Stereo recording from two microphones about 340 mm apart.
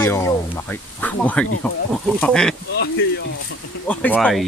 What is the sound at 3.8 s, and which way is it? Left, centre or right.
Speech, centre.